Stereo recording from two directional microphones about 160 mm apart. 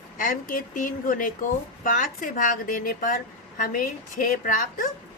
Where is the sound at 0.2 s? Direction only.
60° left (ahead or behind).